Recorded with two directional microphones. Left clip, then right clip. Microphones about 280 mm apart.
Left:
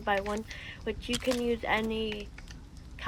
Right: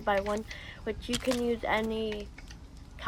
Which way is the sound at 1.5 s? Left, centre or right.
Left.